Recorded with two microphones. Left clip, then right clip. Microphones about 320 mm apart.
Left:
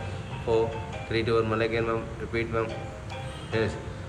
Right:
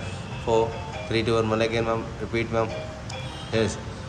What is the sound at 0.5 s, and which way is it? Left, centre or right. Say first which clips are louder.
Speech: right 3 dB; centre.